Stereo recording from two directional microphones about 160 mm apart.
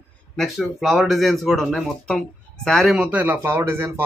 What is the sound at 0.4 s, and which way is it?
Speech, centre (ahead or behind).